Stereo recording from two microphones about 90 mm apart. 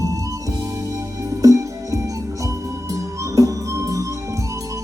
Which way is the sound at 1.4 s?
40° right (ahead or behind).